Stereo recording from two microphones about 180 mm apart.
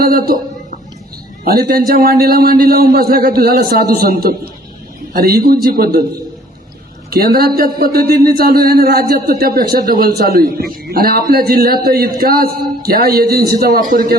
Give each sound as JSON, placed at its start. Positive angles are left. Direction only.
{"t": 0.0, "sound": "a man's voice", "side_deg": -55}
{"t": 7.1, "sound": "a man's voice", "side_deg": -55}